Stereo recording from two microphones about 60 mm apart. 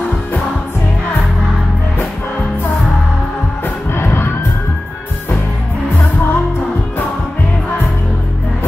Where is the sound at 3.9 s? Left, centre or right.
Left.